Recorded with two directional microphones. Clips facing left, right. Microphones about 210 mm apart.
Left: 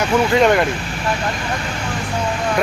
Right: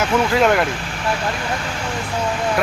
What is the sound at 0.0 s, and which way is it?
Speech, centre (ahead or behind).